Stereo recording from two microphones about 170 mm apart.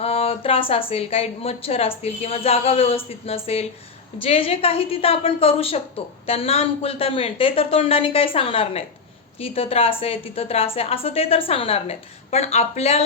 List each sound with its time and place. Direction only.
0.0 s speech: 35° left (ahead or behind)